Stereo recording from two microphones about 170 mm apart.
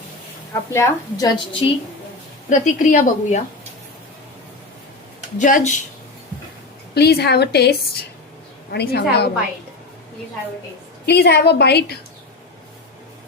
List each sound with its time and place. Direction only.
0.7 s a woman's voice: 15° left (ahead or behind)
2.5 s a woman's voice: 50° left (ahead or behind)
5.4 s a woman's voice: 50° left (ahead or behind)
6.9 s a woman's voice: 70° left (ahead or behind)
11.0 s a woman's voice: 75° left (ahead or behind)